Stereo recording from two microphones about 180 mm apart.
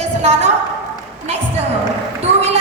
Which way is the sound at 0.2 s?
40° right (ahead or behind).